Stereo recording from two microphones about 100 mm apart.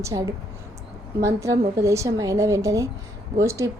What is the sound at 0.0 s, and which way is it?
A woman's voice, 40° right (ahead or behind).